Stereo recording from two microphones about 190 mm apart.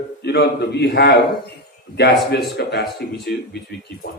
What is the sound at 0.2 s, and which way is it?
A man's voice, 60° left (ahead or behind).